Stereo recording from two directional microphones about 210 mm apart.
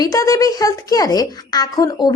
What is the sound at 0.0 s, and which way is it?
A woman's voice, 15° left (ahead or behind).